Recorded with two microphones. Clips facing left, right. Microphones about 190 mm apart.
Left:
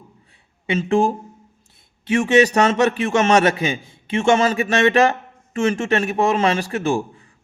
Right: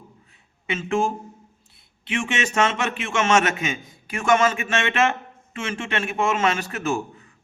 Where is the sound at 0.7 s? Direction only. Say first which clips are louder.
Left 5 dB; 35° left (ahead or behind).